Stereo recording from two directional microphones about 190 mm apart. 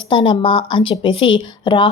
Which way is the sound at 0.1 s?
25° left (ahead or behind).